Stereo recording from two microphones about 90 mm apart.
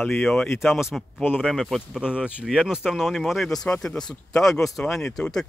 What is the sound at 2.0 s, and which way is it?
Speech, 10° right (ahead or behind).